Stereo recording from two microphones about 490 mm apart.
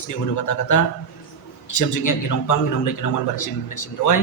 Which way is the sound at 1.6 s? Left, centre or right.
Left.